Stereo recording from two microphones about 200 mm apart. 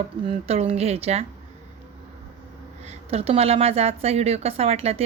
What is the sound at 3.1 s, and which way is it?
A woman's voice, 30° right (ahead or behind).